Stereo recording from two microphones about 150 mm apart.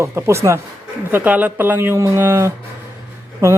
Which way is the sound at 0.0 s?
20° right (ahead or behind).